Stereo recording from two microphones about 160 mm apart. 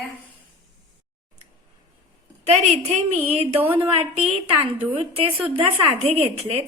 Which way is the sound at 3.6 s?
10° right (ahead or behind).